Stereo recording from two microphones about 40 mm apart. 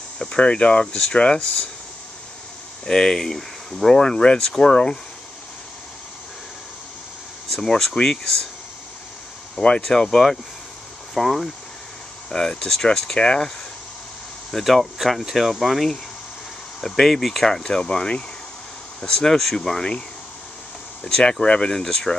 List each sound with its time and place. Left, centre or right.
0.2 s speech: left
2.8 s speech: centre
7.6 s speech: centre
9.8 s speech: centre
11.1 s speech: centre
12.3 s speech: centre
14.5 s speech: centre
17.5 s speech: centre
21.0 s speech: left